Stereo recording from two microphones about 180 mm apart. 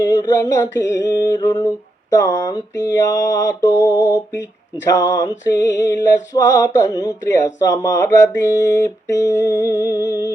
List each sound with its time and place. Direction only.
0.0 s mantra: 15° left (ahead or behind)
2.2 s a sound: 20° left (ahead or behind)
5.5 s mantra: 20° left (ahead or behind)